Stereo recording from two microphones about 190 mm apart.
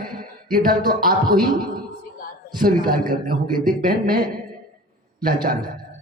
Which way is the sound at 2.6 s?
50° right (ahead or behind).